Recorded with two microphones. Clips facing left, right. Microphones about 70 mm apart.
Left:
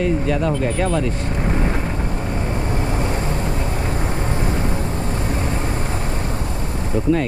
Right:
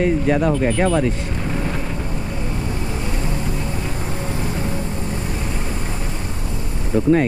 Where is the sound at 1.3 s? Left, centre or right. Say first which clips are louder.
Left 3 dB; left.